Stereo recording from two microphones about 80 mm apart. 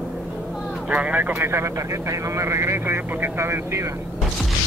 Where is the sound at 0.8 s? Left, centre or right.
Centre; by 3.9 s right.